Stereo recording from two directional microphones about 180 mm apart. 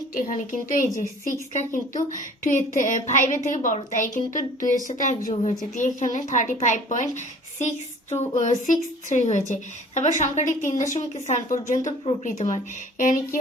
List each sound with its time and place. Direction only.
0.1 s a woman's voice: 45° left (ahead or behind)
8.4 s a woman's voice: 45° left (ahead or behind)